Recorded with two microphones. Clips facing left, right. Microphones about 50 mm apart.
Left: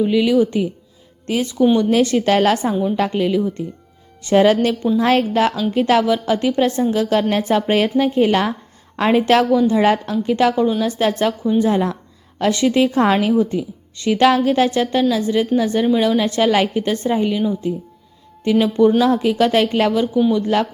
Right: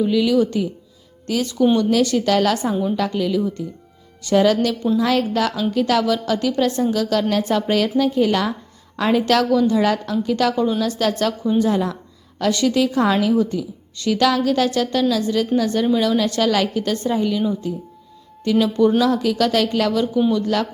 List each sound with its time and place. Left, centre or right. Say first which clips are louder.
0.0 s a woman's voice: left 2 dB; left